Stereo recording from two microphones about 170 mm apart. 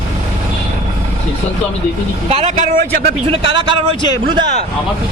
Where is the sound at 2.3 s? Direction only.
45° right (ahead or behind); by 3.1 s 65° right (ahead or behind).